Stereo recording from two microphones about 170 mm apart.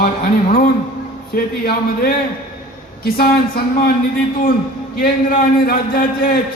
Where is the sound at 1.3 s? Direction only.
60° left (ahead or behind).